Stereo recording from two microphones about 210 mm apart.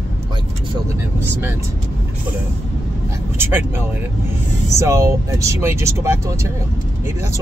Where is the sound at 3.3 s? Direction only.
10° right (ahead or behind).